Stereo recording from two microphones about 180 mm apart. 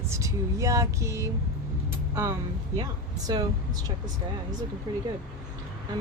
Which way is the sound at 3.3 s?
20° right (ahead or behind).